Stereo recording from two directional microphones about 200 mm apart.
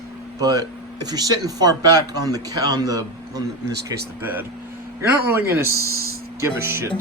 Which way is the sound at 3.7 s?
55° right (ahead or behind).